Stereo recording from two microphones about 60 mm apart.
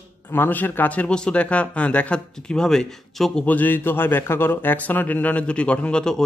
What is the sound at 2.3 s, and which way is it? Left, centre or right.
Speech, centre.